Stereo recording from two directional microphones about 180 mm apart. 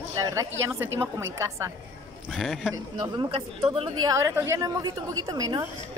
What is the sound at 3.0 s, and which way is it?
A woman's voice, 25° right (ahead or behind).